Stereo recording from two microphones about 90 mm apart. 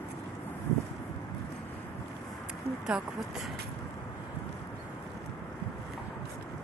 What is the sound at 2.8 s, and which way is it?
Speech, 10° right (ahead or behind).